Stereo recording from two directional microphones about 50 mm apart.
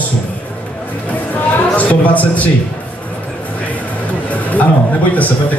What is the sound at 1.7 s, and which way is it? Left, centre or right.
Speech, left.